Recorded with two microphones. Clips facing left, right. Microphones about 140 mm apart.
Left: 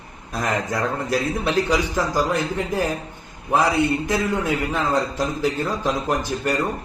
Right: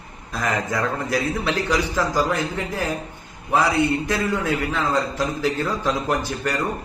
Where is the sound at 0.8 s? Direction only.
15° left (ahead or behind).